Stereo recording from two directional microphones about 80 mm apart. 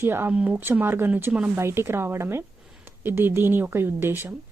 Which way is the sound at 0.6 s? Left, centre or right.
Right.